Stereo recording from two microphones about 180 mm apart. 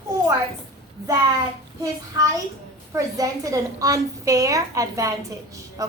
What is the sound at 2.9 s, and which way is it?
A woman's voice, 20° right (ahead or behind).